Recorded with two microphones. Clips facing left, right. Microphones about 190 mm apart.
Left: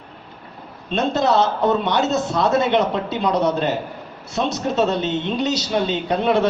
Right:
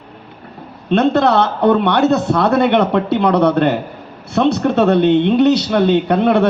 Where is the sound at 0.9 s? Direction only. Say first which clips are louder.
Right 6 dB; 60° right (ahead or behind).